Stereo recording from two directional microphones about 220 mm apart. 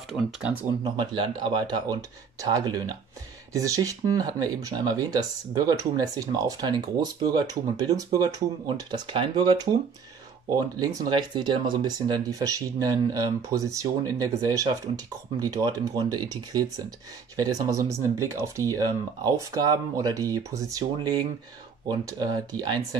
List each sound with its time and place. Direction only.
0.1 s speech: 5° right (ahead or behind)
0.8 s speech: 25° right (ahead or behind)
22.6 s speech: 20° right (ahead or behind)